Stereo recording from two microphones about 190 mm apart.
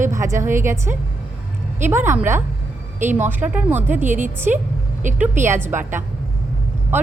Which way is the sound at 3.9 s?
40° right (ahead or behind).